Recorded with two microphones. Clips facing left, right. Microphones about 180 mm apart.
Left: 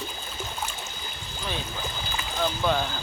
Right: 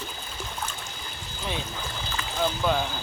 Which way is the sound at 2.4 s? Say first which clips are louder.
Even; 5° right (ahead or behind).